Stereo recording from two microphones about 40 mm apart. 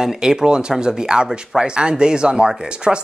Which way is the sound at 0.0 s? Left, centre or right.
Centre.